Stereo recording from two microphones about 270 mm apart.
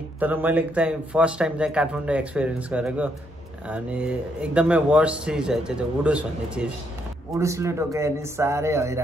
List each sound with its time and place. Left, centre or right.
0.2 s speech: centre